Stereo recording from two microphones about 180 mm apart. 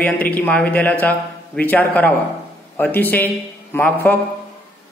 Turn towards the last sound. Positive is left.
turn(degrees=10)  # may be behind; listen again after turning